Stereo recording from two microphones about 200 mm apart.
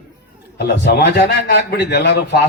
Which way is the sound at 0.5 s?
55° left (ahead or behind).